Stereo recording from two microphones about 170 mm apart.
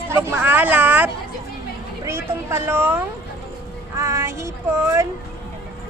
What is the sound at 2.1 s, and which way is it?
Speech, 15° right (ahead or behind).